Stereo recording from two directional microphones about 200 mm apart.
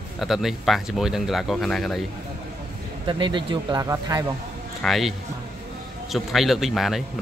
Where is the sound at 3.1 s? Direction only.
25° right (ahead or behind).